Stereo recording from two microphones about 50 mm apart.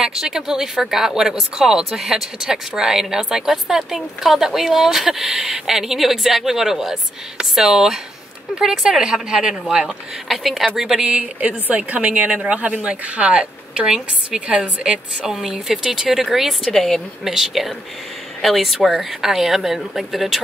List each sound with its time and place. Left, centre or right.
0.0 s a woman's voice: centre
11.1 s a woman's voice: right
13.4 s a woman's voice: centre
16.7 s speech: centre
17.2 s speech: centre